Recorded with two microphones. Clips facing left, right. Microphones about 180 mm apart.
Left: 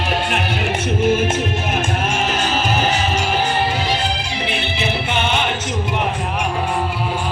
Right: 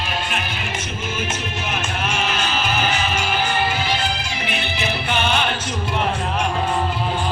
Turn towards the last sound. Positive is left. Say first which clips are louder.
# left 1 dB
turn(degrees=20)  # may be behind; listen again after turning